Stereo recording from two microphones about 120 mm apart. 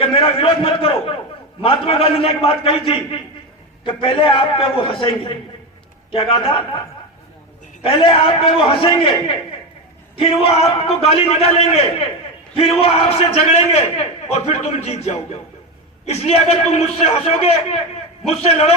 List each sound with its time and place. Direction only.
0.0 s a man's voice: 50° left (ahead or behind)
7.9 s a man's voice: 50° left (ahead or behind)